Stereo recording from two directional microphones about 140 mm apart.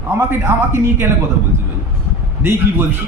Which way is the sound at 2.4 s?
15° right (ahead or behind).